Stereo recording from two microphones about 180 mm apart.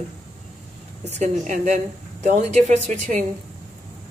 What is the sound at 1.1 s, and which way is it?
Speech, 40° right (ahead or behind).